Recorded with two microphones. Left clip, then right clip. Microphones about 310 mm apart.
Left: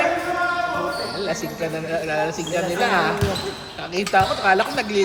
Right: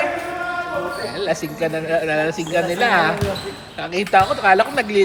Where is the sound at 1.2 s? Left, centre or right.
Right.